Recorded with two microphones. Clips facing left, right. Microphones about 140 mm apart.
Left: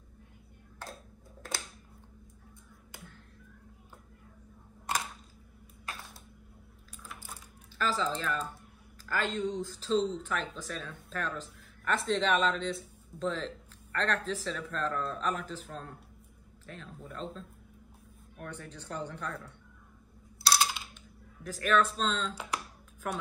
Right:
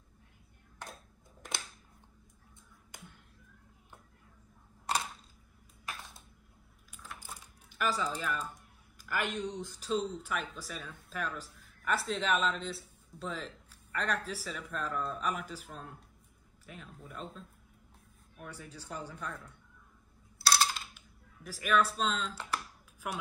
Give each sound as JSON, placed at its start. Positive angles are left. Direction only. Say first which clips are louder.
{"t": 7.2, "sound": "typing", "louder": "left 1 dB", "side_deg": -15}
{"t": 9.0, "sound": "speech", "louder": "left 3 dB", "side_deg": -15}
{"t": 20.5, "sound": "typing", "louder": "left 1 dB", "side_deg": 5}
{"t": 20.9, "sound": "speech", "louder": "left 6 dB", "side_deg": -10}